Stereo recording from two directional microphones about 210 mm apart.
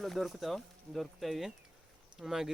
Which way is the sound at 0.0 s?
Centre (ahead or behind).